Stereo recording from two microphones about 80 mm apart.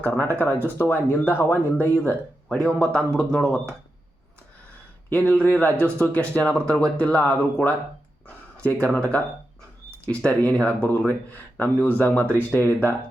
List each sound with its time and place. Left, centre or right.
0.0 s speech: left
5.0 s speech: centre
10.2 s speech: centre